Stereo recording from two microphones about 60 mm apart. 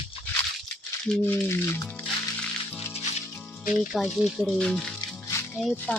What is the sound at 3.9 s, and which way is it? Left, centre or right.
Speech, centre.